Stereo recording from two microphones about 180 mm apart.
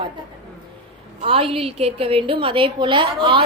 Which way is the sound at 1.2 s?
30° right (ahead or behind).